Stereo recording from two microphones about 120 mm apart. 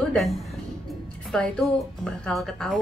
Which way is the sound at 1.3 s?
5° left (ahead or behind).